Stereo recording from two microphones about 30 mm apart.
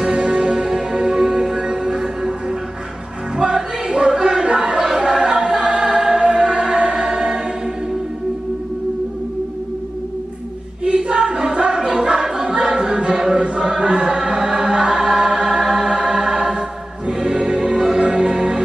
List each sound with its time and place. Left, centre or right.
0.3 s music: centre
3.3 s choir: right
6.1 s music: right
10.8 s choir: right
11.5 s music: right
13.2 s chant: right
15.6 s music: right